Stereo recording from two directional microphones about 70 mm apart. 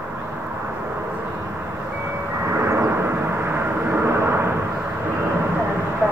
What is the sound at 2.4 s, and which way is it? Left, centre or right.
Vehicle, right.